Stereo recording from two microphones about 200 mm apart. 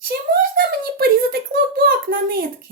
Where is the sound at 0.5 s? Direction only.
50° right (ahead or behind).